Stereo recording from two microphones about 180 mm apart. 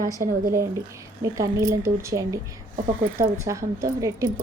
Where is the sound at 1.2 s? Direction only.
20° right (ahead or behind).